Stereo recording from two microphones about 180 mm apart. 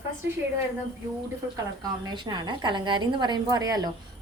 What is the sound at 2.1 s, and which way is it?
A woman's voice, 25° right (ahead or behind).